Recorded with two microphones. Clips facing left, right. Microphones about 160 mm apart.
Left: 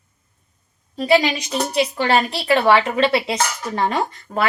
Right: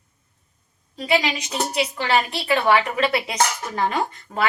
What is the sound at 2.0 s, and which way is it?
Speech, 40° left (ahead or behind).